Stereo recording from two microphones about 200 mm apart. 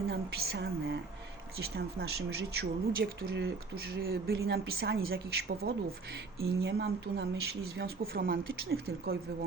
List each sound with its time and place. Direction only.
0.1 s speech: 55° right (ahead or behind)